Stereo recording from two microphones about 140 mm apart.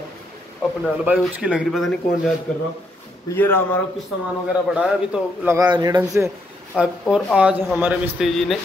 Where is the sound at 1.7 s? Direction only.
Centre (ahead or behind).